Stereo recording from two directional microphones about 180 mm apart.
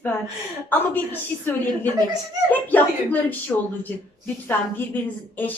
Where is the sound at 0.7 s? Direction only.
10° left (ahead or behind).